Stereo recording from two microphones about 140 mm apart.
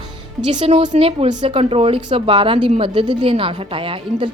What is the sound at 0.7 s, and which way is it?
A woman's voice, 45° right (ahead or behind).